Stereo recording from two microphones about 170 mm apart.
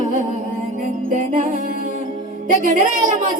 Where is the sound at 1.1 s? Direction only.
50° right (ahead or behind).